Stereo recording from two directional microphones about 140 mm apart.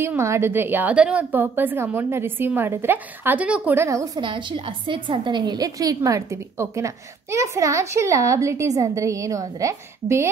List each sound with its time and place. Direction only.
0.0 s a woman's voice: 20° right (ahead or behind)